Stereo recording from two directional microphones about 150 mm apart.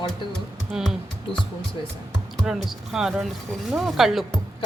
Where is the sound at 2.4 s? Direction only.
5° right (ahead or behind).